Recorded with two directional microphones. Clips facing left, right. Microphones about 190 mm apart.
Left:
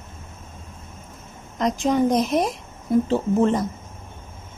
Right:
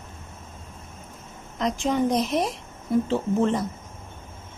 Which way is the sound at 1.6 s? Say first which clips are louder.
Left 3 dB; 40° left (ahead or behind).